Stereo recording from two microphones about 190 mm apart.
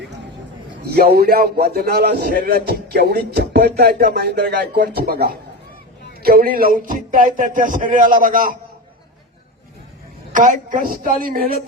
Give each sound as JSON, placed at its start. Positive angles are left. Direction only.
{"t": 0.9, "sound": "a man's voice", "side_deg": -55}
{"t": 10.3, "sound": "a man's voice", "side_deg": -45}